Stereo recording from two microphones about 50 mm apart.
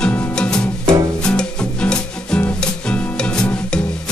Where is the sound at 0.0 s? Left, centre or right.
Centre.